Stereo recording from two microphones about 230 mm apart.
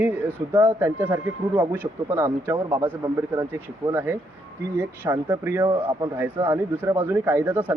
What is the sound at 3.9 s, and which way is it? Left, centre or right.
Speech, centre.